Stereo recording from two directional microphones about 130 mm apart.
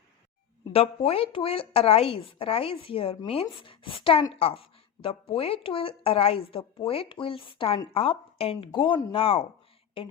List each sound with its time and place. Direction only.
0.7 s speech: 50° left (ahead or behind)